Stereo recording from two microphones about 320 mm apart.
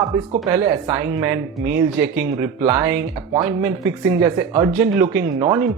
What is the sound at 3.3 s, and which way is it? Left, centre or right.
Speech, centre.